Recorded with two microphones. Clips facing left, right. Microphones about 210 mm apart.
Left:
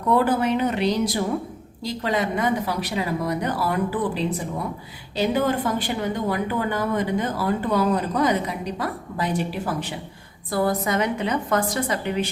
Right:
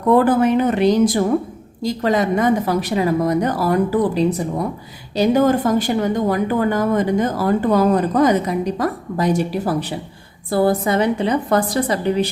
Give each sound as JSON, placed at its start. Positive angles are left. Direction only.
{"t": 0.1, "sound": "a woman's voice", "side_deg": -50}
{"t": 10.5, "sound": "a woman's voice", "side_deg": -30}